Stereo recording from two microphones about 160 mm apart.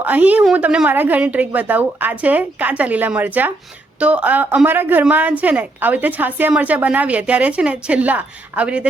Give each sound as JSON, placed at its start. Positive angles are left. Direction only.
{"t": 0.0, "sound": "a woman's voice", "side_deg": -10}